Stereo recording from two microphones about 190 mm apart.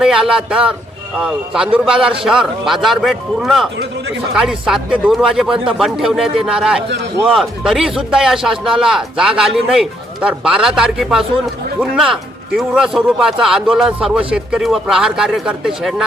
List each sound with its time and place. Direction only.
0.0 s speech: 5° right (ahead or behind)
6.8 s a man's voice: 65° right (ahead or behind)
7.3 s speech: centre (ahead or behind)